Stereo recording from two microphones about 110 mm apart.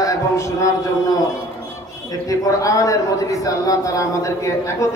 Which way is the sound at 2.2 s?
30° left (ahead or behind).